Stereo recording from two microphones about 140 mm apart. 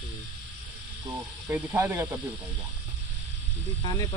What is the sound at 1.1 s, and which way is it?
Speech, 10° right (ahead or behind).